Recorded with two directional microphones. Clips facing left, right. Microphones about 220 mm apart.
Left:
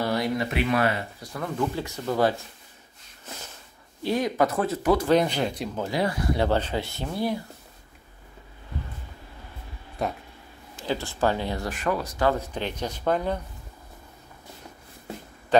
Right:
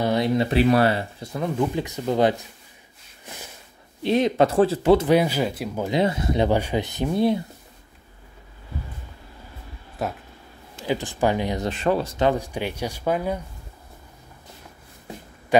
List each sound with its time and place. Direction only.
0.0 s speech: 20° right (ahead or behind)
4.0 s speech: 25° right (ahead or behind)
5.0 s speech: 10° right (ahead or behind)
5.9 s speech: 20° right (ahead or behind)
10.0 s speech: 5° right (ahead or behind)
10.8 s speech: 15° right (ahead or behind)
12.3 s speech: 10° right (ahead or behind)